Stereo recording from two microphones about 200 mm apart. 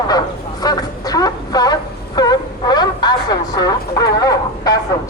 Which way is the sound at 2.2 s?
20° left (ahead or behind).